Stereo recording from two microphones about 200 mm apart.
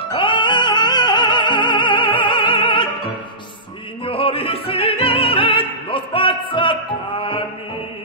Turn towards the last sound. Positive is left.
turn(degrees=25)  # may be behind; listen again after turning